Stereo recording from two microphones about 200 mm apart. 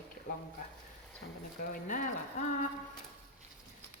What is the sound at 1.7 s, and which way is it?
Speech, 45° left (ahead or behind).